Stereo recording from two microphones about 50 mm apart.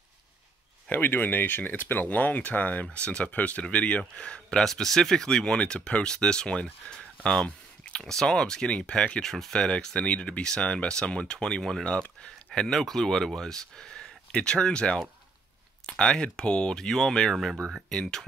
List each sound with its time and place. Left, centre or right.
0.9 s speech: left; by 4.6 s centre
4.6 s speech: centre
7.4 s a sound: left
8.0 s speech: centre; by 9.2 s left
9.2 s speech: centre